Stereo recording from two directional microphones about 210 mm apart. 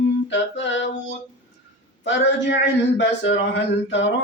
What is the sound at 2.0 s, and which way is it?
Speech, 60° left (ahead or behind).